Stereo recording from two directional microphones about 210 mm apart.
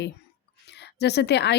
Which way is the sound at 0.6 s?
50° left (ahead or behind).